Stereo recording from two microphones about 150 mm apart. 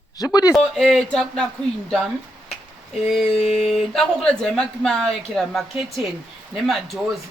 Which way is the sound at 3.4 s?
45° left (ahead or behind).